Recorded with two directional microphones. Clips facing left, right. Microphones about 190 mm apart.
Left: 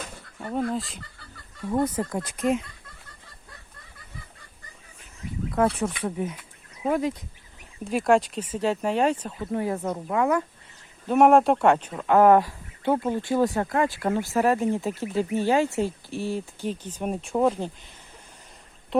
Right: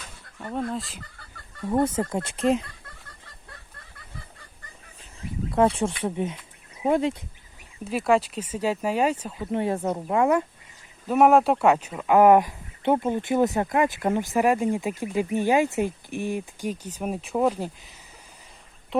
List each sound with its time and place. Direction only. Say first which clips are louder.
0.3 s speech: left 2 dB; 5° left (ahead or behind)
1.7 s speech: right 2 dB; 25° right (ahead or behind)
5.7 s speech: right 1 dB; 25° right (ahead or behind)
7.9 s speech: left 1 dB; centre (ahead or behind)
9.5 s speech: right 2 dB; 25° right (ahead or behind)
11.1 s speech: left 1 dB; centre (ahead or behind)